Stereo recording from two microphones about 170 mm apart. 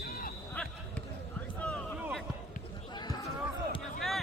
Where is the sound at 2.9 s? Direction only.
25° left (ahead or behind).